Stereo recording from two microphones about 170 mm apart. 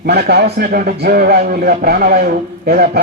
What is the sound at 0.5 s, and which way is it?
A man's voice, 60° right (ahead or behind).